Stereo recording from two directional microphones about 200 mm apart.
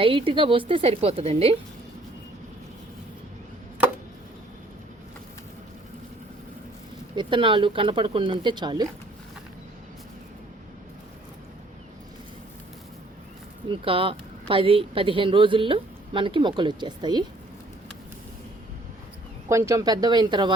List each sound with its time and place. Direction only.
0.0 s speech: 25° right (ahead or behind)
7.2 s speech: 25° right (ahead or behind)
13.7 s speech: 25° right (ahead or behind)
19.5 s speech: 15° right (ahead or behind)